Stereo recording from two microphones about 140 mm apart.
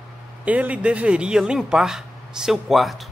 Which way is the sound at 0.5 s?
10° right (ahead or behind).